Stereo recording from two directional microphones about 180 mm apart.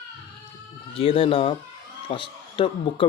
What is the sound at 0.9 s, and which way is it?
Speech, 30° left (ahead or behind).